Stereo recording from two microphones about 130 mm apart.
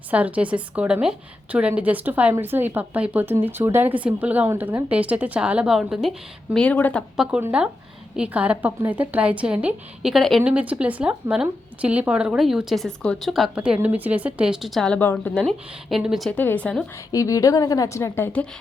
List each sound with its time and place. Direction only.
0.1 s a woman's voice: 10° right (ahead or behind); by 7.0 s 10° left (ahead or behind)
7.2 s a woman's voice: 5° right (ahead or behind); by 15.4 s 15° left (ahead or behind)
15.4 s a woman's voice: centre (ahead or behind)
16.3 s speech: 10° left (ahead or behind)
17.1 s a woman's voice: 25° left (ahead or behind)